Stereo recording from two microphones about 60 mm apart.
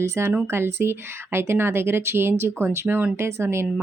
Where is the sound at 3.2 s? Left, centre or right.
Right.